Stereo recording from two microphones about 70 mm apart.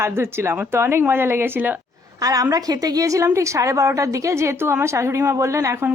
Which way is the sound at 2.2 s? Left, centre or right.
Right.